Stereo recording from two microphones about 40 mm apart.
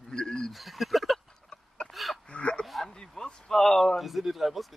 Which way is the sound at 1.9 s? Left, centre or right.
Centre.